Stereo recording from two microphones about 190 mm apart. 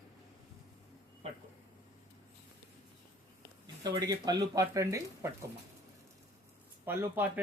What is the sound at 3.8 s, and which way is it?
Speech, 20° right (ahead or behind).